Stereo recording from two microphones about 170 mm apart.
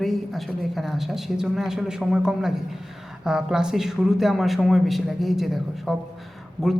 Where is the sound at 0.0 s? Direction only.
Centre (ahead or behind).